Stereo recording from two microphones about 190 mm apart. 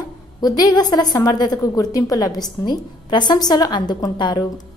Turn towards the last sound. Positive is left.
turn(degrees=25)  # may be behind; listen again after turning